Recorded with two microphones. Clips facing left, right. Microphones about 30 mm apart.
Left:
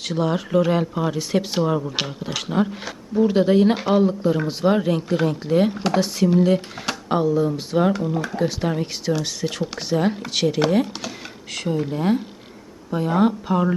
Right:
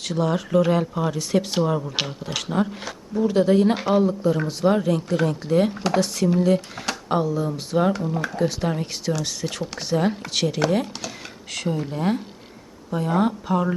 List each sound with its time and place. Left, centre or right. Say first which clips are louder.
0.0 s speech: left 1 dB; centre